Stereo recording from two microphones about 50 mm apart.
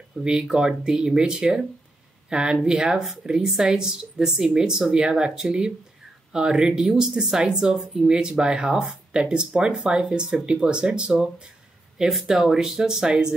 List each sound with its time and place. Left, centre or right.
0.2 s speech: centre
12.1 s speech: centre